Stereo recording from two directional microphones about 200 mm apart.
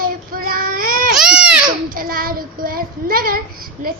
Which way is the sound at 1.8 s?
45° right (ahead or behind).